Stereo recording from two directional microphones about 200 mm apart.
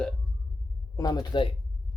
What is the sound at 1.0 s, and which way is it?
Speech, 20° left (ahead or behind).